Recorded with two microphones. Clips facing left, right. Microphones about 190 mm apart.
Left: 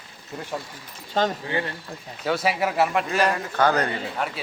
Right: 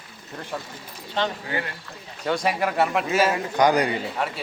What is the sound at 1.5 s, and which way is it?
Speech, 30° left (ahead or behind).